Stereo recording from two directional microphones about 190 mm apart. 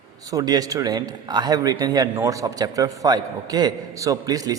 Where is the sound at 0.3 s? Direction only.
20° right (ahead or behind).